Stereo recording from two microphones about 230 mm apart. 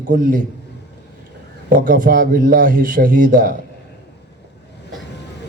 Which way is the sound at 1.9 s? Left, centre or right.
Right.